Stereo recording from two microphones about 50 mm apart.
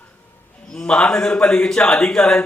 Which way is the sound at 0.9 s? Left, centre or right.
Centre.